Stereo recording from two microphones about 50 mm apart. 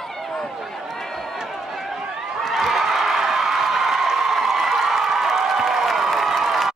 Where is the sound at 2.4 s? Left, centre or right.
Centre.